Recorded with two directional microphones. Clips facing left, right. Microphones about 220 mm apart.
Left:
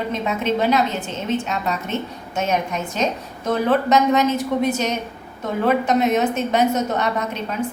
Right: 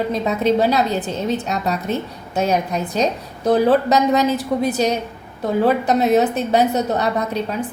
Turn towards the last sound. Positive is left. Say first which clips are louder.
# right 3 dB
turn(degrees=-35)  # may be behind; listen again after turning